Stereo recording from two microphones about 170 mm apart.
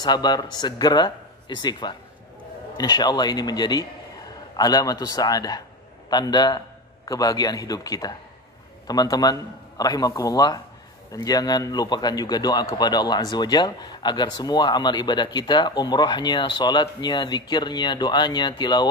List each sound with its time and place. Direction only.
0.0 s a man's voice: 25° left (ahead or behind)